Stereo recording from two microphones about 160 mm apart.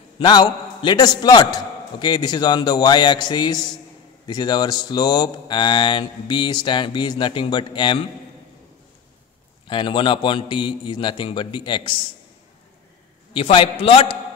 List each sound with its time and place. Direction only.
0.2 s speech: 30° left (ahead or behind)
9.7 s a man's voice: 30° left (ahead or behind)
13.3 s a man's voice: 35° left (ahead or behind)